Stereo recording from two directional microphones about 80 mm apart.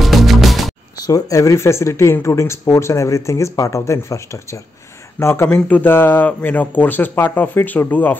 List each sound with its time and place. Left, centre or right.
0.0 s music: centre
1.0 s speech: left
5.5 s speech: left